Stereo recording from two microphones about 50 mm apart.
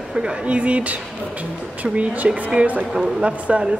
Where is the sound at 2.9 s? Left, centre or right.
Centre.